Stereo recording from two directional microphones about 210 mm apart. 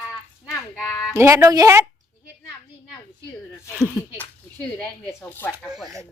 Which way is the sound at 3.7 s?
5° right (ahead or behind).